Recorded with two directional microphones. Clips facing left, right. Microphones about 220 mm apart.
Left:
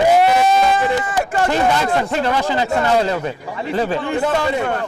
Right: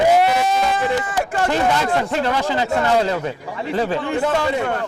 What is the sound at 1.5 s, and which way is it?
Speech, 20° left (ahead or behind).